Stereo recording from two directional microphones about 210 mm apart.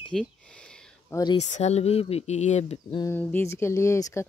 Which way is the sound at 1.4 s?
35° left (ahead or behind).